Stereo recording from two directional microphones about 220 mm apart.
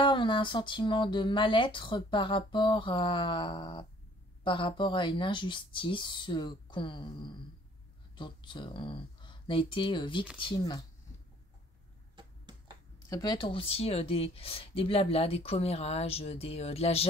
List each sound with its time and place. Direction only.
0.0 s speech: 20° left (ahead or behind)
8.2 s speech: 20° left (ahead or behind)
13.1 s speech: 20° left (ahead or behind)